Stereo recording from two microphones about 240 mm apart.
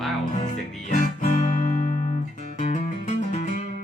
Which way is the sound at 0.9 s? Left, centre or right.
Left.